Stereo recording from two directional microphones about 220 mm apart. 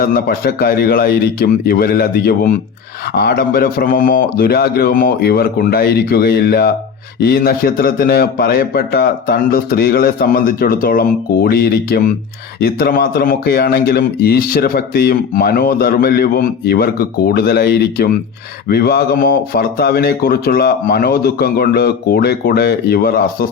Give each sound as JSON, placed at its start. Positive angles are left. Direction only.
{"t": 0.0, "sound": "speech", "side_deg": 40}